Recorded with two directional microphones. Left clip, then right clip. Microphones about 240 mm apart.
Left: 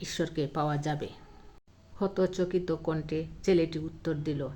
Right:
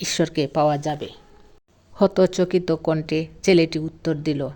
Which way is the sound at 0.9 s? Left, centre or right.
Centre.